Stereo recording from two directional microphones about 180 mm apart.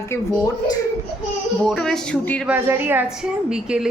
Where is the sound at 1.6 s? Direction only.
5° left (ahead or behind).